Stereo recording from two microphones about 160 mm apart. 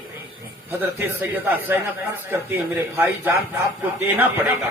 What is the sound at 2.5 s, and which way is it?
Speech, 15° right (ahead or behind).